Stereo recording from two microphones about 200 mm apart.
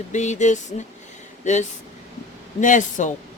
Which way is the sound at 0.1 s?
35° left (ahead or behind).